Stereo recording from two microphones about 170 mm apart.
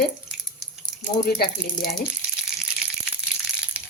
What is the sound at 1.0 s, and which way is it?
Speech, 65° left (ahead or behind).